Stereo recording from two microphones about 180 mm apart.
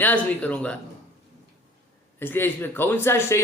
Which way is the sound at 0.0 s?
10° left (ahead or behind).